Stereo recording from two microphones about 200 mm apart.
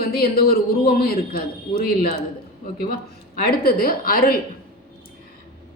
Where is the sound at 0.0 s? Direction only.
50° left (ahead or behind).